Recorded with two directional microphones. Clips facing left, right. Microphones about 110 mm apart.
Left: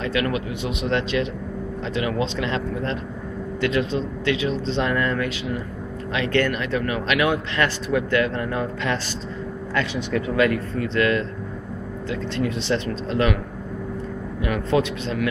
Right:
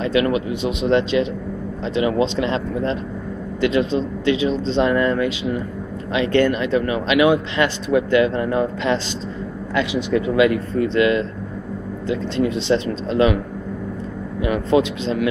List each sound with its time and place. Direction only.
0.0 s a man's voice: 25° right (ahead or behind)
14.4 s a man's voice: 20° right (ahead or behind)